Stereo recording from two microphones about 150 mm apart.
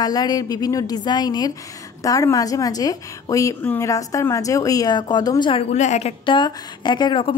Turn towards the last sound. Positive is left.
turn(degrees=35)  # may be behind; listen again after turning